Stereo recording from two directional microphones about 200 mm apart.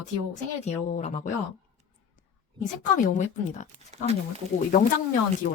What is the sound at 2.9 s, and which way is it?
Speech, 35° left (ahead or behind).